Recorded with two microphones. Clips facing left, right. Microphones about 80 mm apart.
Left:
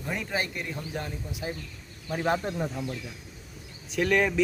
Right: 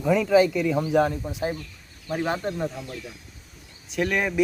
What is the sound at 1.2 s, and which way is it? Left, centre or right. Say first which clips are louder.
Speech: right 7 dB; right.